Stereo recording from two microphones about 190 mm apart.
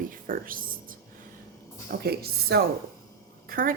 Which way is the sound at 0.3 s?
45° right (ahead or behind).